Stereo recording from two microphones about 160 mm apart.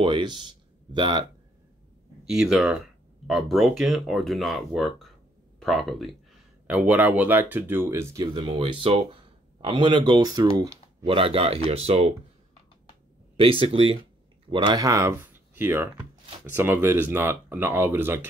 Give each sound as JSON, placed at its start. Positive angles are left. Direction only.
{"t": 0.0, "sound": "speech", "side_deg": -30}
{"t": 2.2, "sound": "speech", "side_deg": 0}
{"t": 6.7, "sound": "speech", "side_deg": -10}
{"t": 10.6, "sound": "a sound", "side_deg": -20}
{"t": 11.1, "sound": "speech", "side_deg": -35}
{"t": 13.4, "sound": "speech", "side_deg": -35}